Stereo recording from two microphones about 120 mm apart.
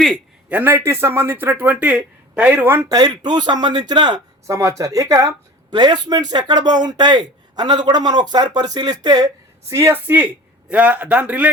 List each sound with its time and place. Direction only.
0.5 s a man's voice: 20° right (ahead or behind)
2.9 s speech: 35° right (ahead or behind)
4.4 s a man's voice: 25° right (ahead or behind)